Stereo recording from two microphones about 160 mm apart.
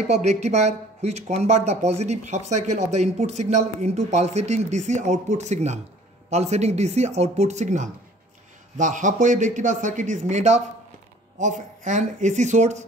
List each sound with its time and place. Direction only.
0.1 s speech: 45° right (ahead or behind)